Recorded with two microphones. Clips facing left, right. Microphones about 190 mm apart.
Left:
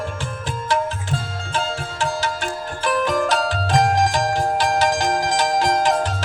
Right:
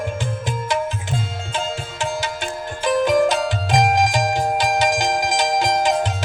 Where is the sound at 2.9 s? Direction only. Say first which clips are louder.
Right 4 dB; 20° right (ahead or behind).